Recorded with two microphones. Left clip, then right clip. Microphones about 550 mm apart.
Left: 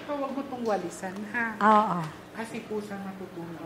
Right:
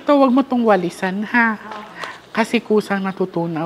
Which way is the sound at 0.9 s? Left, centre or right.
Right.